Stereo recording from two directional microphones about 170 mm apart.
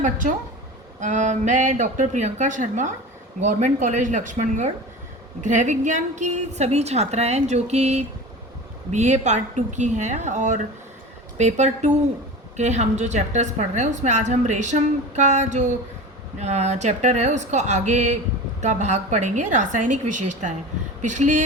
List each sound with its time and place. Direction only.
0.0 s a woman's voice: 50° right (ahead or behind)